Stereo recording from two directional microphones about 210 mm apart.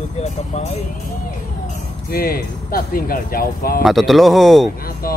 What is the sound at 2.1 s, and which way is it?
Speech, 45° left (ahead or behind).